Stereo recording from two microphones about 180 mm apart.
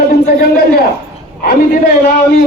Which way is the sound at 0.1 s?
60° left (ahead or behind).